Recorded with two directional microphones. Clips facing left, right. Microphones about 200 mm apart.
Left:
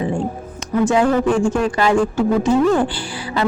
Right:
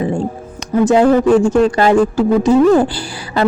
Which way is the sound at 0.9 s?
35° right (ahead or behind).